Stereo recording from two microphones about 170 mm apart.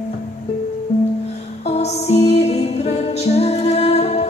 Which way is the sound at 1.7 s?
40° left (ahead or behind).